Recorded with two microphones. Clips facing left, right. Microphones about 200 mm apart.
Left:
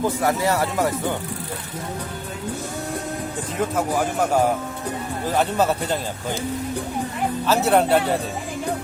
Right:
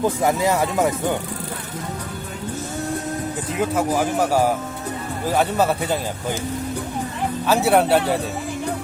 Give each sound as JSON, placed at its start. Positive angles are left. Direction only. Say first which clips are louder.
{"t": 0.0, "sound": "speech", "louder": "right 2 dB", "side_deg": -20}
{"t": 3.6, "sound": "speech", "louder": "right 2 dB", "side_deg": -5}
{"t": 7.4, "sound": "speech", "louder": "right 1 dB", "side_deg": -10}